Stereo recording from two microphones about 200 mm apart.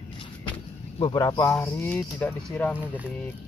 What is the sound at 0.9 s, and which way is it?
Speech, 25° left (ahead or behind).